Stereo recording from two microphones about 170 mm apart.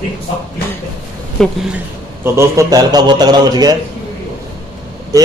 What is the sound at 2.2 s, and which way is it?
A man's voice, 15° right (ahead or behind).